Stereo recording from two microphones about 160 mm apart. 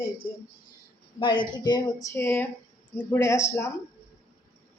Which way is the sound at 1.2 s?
30° left (ahead or behind).